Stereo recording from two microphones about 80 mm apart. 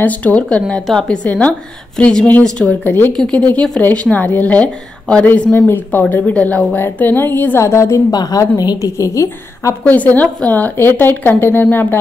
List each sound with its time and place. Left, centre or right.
0.0 s a woman's voice: centre
1.2 s a woman's voice: centre
7.6 s a woman's voice: left
8.1 s a woman's voice: left
8.9 s a woman's voice: left
9.8 s a woman's voice: left